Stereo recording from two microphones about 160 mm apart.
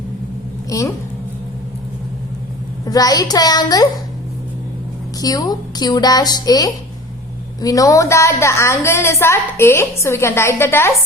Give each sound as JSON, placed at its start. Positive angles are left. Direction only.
{"t": 0.7, "sound": "a woman's voice", "side_deg": 20}
{"t": 2.8, "sound": "a woman's voice", "side_deg": 25}
{"t": 5.2, "sound": "a woman's voice", "side_deg": 25}